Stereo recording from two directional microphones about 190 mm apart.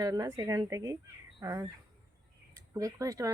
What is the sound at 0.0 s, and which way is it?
Speech, 15° right (ahead or behind).